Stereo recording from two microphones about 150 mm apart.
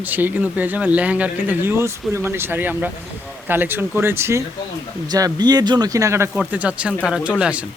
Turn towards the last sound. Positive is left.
turn(degrees=-5)  # may be behind; listen again after turning